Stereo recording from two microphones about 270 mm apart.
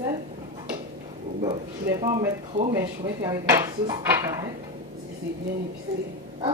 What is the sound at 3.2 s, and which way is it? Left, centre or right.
Dishes, centre.